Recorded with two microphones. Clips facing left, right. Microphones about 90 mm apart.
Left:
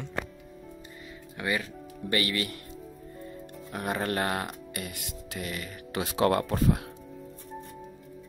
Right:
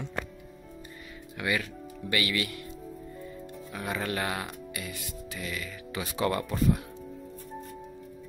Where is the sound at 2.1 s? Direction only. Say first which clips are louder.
Left 1 dB; 35° left (ahead or behind).